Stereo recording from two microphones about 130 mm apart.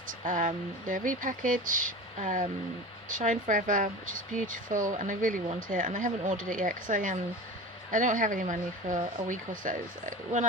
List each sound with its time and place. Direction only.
0.1 s speech: 85° right